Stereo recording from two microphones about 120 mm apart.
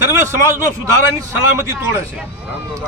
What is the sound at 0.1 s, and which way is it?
A man's voice, 25° right (ahead or behind).